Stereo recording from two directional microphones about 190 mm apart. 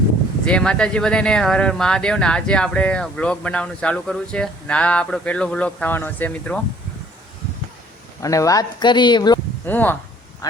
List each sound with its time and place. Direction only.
0.4 s speech: 5° left (ahead or behind)
8.2 s speech: 15° left (ahead or behind)
9.6 s speech: 10° left (ahead or behind)